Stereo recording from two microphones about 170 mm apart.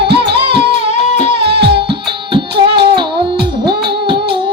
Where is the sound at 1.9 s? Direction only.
30° right (ahead or behind).